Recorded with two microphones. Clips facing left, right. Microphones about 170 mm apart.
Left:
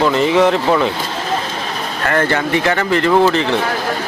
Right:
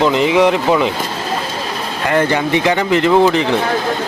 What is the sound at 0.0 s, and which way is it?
Speech, 15° right (ahead or behind).